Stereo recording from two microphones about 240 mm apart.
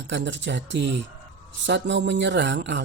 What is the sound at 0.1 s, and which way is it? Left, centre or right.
Speech, right.